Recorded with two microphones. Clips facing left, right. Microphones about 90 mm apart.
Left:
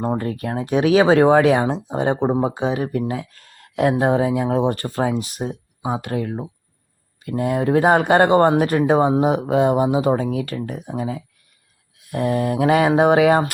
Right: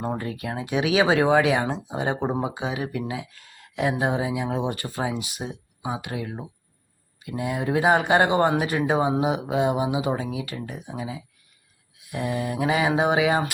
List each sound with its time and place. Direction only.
0.2 s speech: 45° left (ahead or behind)